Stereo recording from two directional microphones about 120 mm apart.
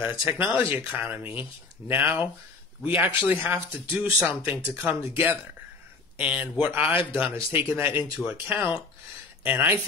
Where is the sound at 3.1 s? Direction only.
50° left (ahead or behind).